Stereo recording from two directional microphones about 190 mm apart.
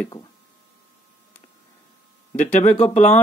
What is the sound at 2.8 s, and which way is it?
Speech, 35° left (ahead or behind).